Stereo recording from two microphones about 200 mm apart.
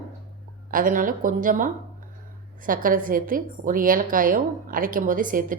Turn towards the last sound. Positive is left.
turn(degrees=-45)  # may be behind; listen again after turning